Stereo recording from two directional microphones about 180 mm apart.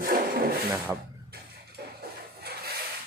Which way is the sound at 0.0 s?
55° right (ahead or behind).